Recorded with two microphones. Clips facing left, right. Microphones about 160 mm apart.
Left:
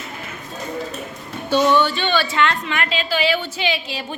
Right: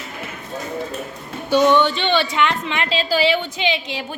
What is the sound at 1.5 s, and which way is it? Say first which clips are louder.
A woman's voice: right 2 dB; 15° right (ahead or behind).